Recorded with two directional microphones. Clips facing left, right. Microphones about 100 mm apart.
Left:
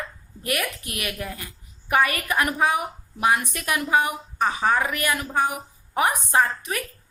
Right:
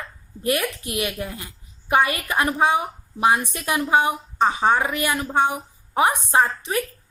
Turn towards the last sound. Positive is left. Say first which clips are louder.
# right 2 dB
turn(degrees=-30)  # may be behind; listen again after turning